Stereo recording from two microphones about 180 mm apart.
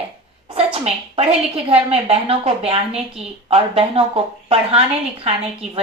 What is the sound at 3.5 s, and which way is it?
A woman's voice, 35° right (ahead or behind).